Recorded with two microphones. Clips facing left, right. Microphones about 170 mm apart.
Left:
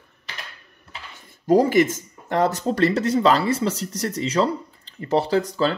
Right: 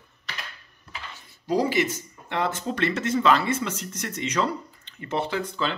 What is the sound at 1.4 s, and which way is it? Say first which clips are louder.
Speech: left 7 dB; 50° left (ahead or behind).